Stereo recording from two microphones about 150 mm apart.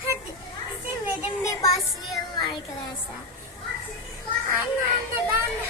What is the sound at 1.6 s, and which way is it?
Child singing, 20° left (ahead or behind).